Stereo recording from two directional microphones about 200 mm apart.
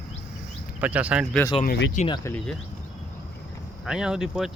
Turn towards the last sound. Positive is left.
turn(degrees=-5)  # may be behind; listen again after turning